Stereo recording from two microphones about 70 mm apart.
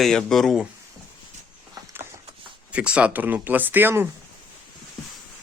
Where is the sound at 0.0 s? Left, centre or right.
Centre.